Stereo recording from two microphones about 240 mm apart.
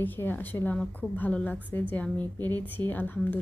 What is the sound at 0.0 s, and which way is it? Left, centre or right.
A woman's voice, centre.